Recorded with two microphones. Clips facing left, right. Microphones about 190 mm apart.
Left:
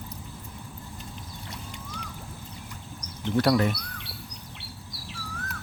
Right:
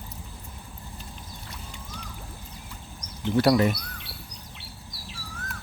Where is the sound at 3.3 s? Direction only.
5° right (ahead or behind).